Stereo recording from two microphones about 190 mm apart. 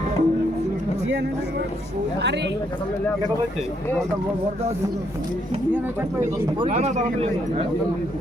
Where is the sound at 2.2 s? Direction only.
65° right (ahead or behind).